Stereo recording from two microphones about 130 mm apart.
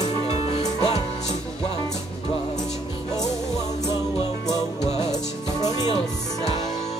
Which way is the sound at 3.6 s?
30° left (ahead or behind).